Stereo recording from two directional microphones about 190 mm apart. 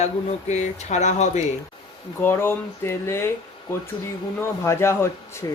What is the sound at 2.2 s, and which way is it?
Speech, 15° left (ahead or behind).